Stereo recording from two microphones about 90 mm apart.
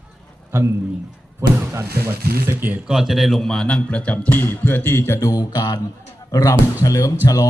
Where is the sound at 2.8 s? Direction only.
5° right (ahead or behind).